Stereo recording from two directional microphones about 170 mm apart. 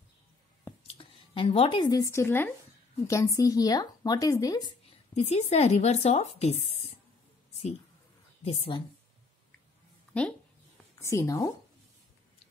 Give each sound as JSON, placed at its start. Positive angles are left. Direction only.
{"t": 0.9, "sound": "speech", "side_deg": 30}
{"t": 5.1, "sound": "speech", "side_deg": 40}
{"t": 8.5, "sound": "speech", "side_deg": 30}
{"t": 11.0, "sound": "speech", "side_deg": 15}